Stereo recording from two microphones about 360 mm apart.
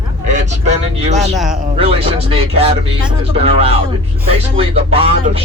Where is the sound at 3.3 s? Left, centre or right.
Centre.